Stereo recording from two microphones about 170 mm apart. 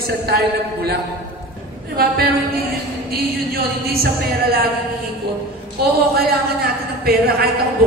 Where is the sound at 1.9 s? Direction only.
65° right (ahead or behind).